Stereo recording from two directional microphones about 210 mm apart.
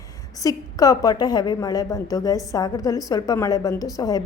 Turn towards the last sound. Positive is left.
turn(degrees=15)  # may be behind; listen again after turning